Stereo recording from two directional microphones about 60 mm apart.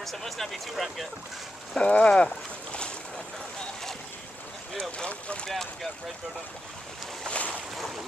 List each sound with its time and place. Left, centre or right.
0.0 s speech: centre
1.7 s speech: centre
4.7 s speech: centre
5.5 s speech: centre
7.2 s boat: left
7.7 s boat: centre